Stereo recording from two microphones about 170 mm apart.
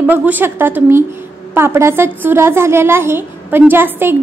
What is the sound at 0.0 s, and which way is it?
A woman's voice, 10° right (ahead or behind).